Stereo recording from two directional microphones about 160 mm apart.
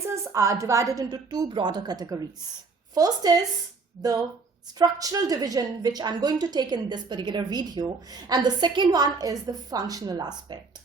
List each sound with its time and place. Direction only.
0.0 s a woman's voice: 20° right (ahead or behind)